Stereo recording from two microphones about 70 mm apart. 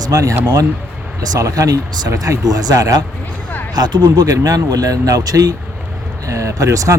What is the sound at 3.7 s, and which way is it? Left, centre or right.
Speech, right.